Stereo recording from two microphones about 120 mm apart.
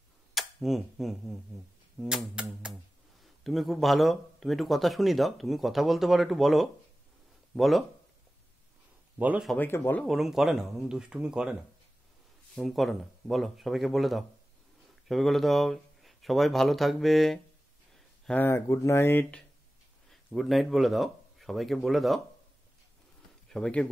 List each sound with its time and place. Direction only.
0.3 s speech: centre (ahead or behind)
2.0 s a sound: 5° right (ahead or behind)
3.4 s speech: centre (ahead or behind)
9.2 s a sound: 10° right (ahead or behind)
9.6 s speech: 15° left (ahead or behind)
10.0 s speech: centre (ahead or behind)
12.5 s speech: centre (ahead or behind)
18.3 s speech: 20° left (ahead or behind)
20.3 s speech: centre (ahead or behind)
23.5 s speech: 10° left (ahead or behind)